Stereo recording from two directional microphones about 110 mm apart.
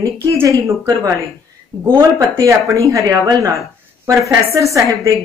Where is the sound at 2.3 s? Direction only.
30° right (ahead or behind).